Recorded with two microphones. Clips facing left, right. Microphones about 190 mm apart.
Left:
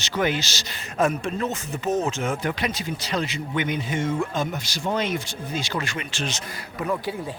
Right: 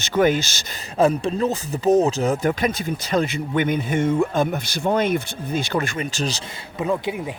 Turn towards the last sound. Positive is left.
turn(degrees=-20)  # may be behind; listen again after turning